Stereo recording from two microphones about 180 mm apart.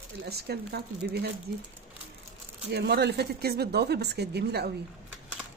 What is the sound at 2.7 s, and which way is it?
Speech, 65° right (ahead or behind).